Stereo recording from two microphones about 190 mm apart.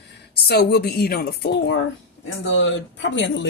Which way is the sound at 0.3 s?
60° left (ahead or behind).